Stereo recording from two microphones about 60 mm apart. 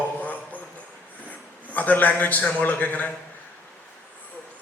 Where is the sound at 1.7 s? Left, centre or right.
Left.